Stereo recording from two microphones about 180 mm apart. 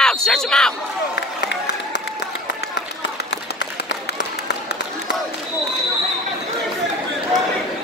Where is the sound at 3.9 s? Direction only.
75° left (ahead or behind).